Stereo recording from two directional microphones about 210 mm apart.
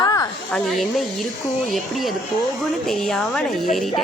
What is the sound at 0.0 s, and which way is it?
Snake, 15° left (ahead or behind).